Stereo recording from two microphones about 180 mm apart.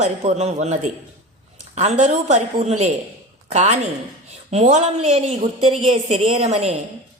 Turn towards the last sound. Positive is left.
turn(degrees=-35)  # may be behind; listen again after turning